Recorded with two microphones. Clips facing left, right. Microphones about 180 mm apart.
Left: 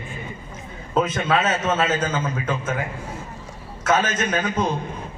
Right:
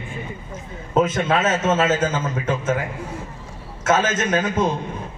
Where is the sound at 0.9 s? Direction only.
25° right (ahead or behind).